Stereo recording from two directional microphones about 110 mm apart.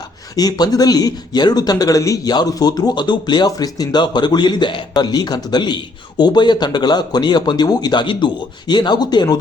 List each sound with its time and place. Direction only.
0.3 s speech: 35° left (ahead or behind)